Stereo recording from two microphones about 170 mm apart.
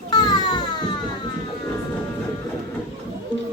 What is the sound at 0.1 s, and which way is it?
Baby cry, 25° left (ahead or behind).